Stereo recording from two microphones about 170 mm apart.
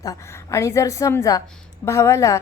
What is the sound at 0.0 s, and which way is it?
A woman's voice, 20° left (ahead or behind).